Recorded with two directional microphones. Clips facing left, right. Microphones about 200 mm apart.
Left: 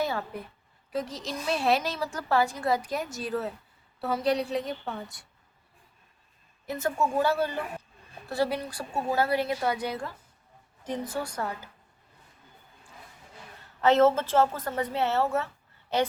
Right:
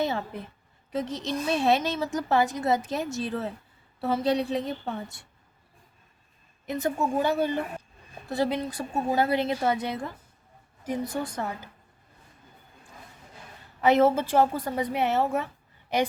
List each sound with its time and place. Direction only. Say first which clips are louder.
0.0 s a woman's voice: right 2 dB; 20° right (ahead or behind)
6.7 s a woman's voice: right 1 dB; 20° right (ahead or behind)
10.8 s a woman's voice: right 2 dB; 10° right (ahead or behind)
13.8 s a woman's voice: even; 10° right (ahead or behind)